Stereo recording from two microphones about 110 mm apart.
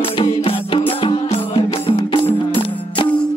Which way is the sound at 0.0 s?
55° left (ahead or behind).